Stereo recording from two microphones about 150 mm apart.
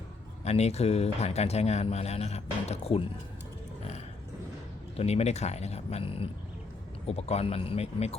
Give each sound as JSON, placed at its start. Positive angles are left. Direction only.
{"t": 0.4, "sound": "speech", "side_deg": 45}
{"t": 4.9, "sound": "speech", "side_deg": 45}